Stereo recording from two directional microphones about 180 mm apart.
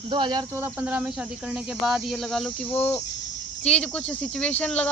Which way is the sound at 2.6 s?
10° left (ahead or behind).